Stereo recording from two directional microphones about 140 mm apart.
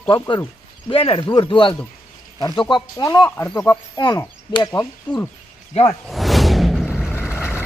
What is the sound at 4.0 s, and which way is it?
Speech, 30° left (ahead or behind).